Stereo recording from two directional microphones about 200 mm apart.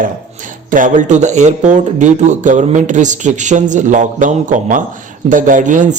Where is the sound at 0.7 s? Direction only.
40° right (ahead or behind).